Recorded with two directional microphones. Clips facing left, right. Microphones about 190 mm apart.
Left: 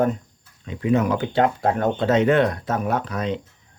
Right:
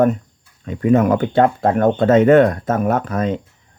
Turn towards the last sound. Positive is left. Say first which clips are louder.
# right 5 dB
turn(degrees=-50)  # may be behind; listen again after turning